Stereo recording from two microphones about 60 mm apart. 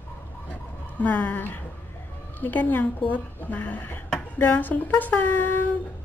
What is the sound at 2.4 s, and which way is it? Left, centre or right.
A woman's voice, left.